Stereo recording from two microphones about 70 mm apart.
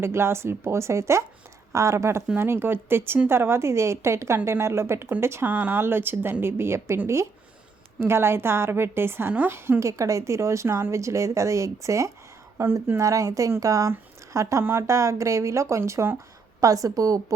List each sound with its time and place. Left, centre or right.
0.0 s a woman's voice: right
5.5 s a woman's voice: right
8.0 s a woman's voice: right
9.8 s speech: right
12.5 s a woman's voice: right
13.0 s speech: right
14.6 s speech: right
16.6 s a woman's voice: right